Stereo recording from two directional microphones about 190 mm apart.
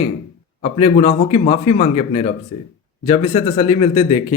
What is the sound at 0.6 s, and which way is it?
Speech, 30° left (ahead or behind).